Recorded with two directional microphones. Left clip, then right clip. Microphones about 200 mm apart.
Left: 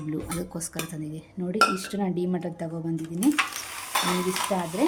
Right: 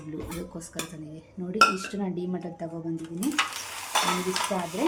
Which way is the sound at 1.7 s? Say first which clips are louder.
Left 3 dB; 35° left (ahead or behind).